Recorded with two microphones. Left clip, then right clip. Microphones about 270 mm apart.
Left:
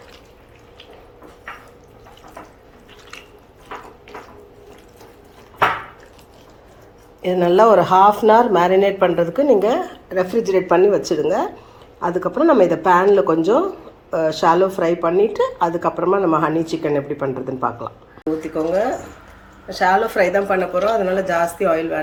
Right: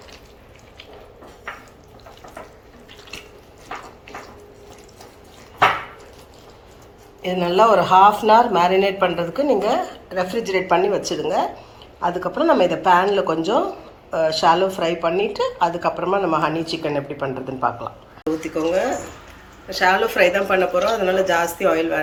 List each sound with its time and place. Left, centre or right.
7.2 s speech: left